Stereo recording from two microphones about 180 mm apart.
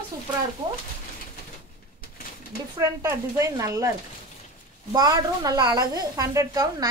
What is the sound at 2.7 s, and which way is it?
A woman's voice, 15° right (ahead or behind).